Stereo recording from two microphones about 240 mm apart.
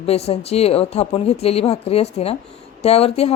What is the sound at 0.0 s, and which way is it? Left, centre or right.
Speech, left.